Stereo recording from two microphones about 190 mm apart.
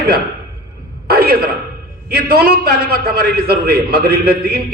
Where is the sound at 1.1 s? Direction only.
50° right (ahead or behind).